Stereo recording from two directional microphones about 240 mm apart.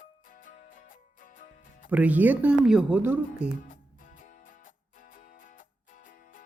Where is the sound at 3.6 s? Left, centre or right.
Left.